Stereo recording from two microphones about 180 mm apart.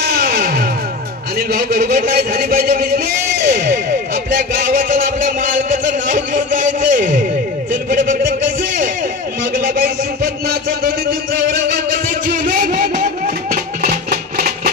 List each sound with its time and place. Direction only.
0.1 s music: 55° right (ahead or behind)
1.5 s a man's voice: 55° right (ahead or behind)
3.4 s a sound: 55° right (ahead or behind)
12.4 s music: 45° right (ahead or behind)